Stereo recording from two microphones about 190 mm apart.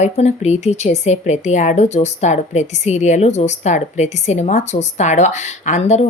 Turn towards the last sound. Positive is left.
turn(degrees=35)  # may be behind; listen again after turning